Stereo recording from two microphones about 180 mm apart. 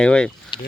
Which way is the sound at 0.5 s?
25° left (ahead or behind).